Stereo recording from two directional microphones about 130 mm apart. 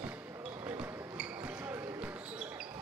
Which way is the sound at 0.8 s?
10° right (ahead or behind).